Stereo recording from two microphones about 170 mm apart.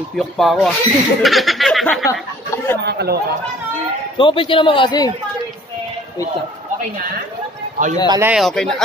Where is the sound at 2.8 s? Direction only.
70° right (ahead or behind).